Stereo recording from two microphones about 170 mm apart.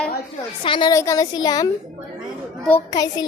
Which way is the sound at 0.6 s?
25° left (ahead or behind).